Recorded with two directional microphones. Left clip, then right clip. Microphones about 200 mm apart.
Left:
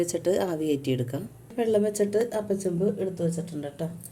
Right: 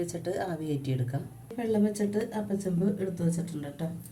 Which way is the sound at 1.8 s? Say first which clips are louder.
Left 6 dB; 55° left (ahead or behind).